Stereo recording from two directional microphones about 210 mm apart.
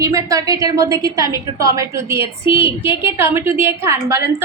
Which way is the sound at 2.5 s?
25° left (ahead or behind).